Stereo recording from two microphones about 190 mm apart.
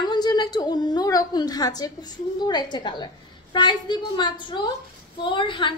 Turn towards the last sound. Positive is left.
turn(degrees=25)  # may be behind; listen again after turning